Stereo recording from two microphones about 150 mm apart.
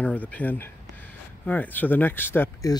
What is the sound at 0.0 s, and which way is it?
Speech, 10° left (ahead or behind).